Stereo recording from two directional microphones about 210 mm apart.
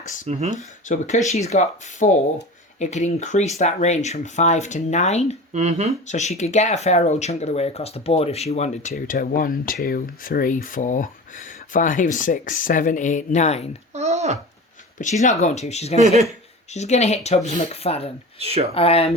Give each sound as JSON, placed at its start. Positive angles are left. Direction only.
{"t": 0.3, "sound": "speech", "side_deg": -30}
{"t": 0.5, "sound": "speech", "side_deg": 35}
{"t": 5.5, "sound": "speech", "side_deg": -35}
{"t": 6.1, "sound": "speech", "side_deg": 35}
{"t": 13.9, "sound": "a sound", "side_deg": -30}
{"t": 14.9, "sound": "speech", "side_deg": 35}
{"t": 16.0, "sound": "speech", "side_deg": -30}
{"t": 16.7, "sound": "speech", "side_deg": 30}
{"t": 18.3, "sound": "speech", "side_deg": -30}
{"t": 18.7, "sound": "speech", "side_deg": 30}